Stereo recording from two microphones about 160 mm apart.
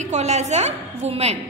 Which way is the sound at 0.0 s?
45° right (ahead or behind).